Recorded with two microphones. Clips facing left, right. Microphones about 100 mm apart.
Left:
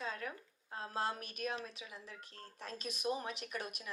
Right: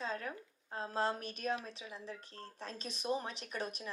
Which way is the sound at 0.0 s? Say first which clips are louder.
Right 2 dB; 30° right (ahead or behind).